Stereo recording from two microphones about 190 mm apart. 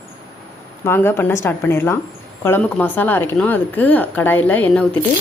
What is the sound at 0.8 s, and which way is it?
A woman's voice, 10° left (ahead or behind).